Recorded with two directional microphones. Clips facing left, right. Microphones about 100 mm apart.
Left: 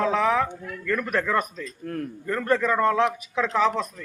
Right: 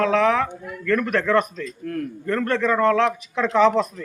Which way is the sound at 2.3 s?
10° left (ahead or behind).